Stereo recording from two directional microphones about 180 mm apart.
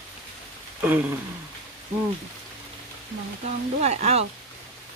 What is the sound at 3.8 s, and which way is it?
Speech, 35° right (ahead or behind).